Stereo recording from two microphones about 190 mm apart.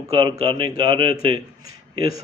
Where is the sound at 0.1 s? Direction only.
20° right (ahead or behind).